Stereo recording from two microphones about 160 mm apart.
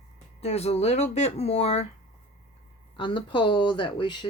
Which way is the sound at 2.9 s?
30° left (ahead or behind).